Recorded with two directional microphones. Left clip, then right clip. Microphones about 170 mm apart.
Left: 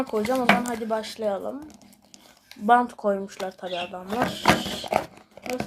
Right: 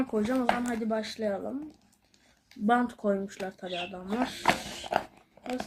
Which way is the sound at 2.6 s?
20° right (ahead or behind).